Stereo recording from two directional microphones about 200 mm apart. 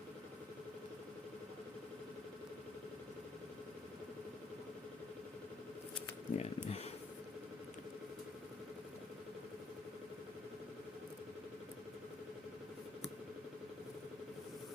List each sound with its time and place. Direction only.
6.3 s speech: 30° left (ahead or behind)